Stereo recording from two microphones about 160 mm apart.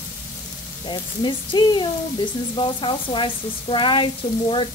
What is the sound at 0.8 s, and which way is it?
Speech, 30° left (ahead or behind).